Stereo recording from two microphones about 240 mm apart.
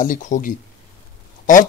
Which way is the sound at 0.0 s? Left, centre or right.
Left.